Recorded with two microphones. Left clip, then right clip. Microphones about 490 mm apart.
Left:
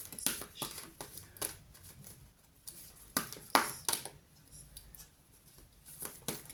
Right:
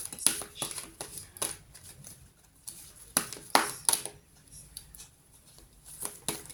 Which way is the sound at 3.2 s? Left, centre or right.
Left.